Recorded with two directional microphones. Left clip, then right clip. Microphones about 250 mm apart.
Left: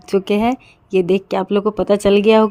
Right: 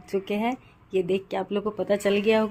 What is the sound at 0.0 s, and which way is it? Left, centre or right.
Speech, left.